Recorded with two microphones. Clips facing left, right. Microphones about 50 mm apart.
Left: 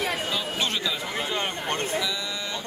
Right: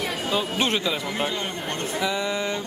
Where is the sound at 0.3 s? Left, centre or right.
Right.